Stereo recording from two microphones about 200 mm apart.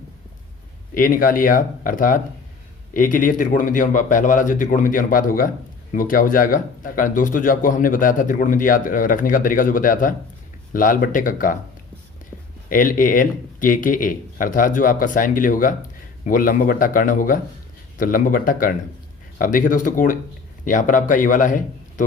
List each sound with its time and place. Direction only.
0.9 s speech: 45° left (ahead or behind)
12.6 s speech: 45° left (ahead or behind)